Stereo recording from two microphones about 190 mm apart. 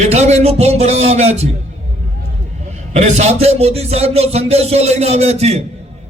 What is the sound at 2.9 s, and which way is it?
Speech, 35° right (ahead or behind).